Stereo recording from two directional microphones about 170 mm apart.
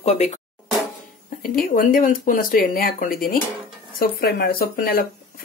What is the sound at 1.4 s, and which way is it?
Speech, 55° left (ahead or behind).